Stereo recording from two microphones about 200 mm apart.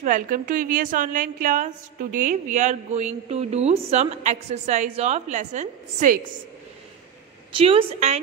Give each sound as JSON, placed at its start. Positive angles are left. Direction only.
{"t": 0.0, "sound": "a woman's voice", "side_deg": -40}
{"t": 7.5, "sound": "a woman's voice", "side_deg": -25}